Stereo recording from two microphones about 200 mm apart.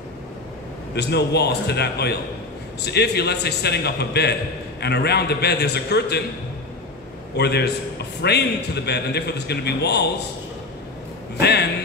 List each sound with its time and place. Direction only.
0.9 s a man's voice: 55° left (ahead or behind)
7.3 s a man's voice: 55° left (ahead or behind)
11.3 s speech: 55° left (ahead or behind)